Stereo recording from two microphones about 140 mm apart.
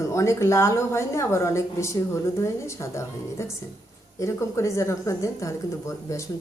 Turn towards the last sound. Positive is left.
turn(degrees=20)  # may be behind; listen again after turning